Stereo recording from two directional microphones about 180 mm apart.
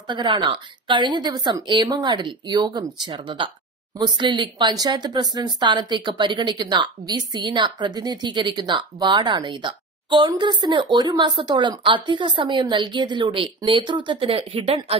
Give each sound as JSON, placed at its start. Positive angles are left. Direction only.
{"t": 0.0, "sound": "speech", "side_deg": -25}